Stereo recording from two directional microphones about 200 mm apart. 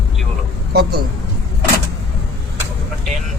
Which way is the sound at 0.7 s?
50° right (ahead or behind).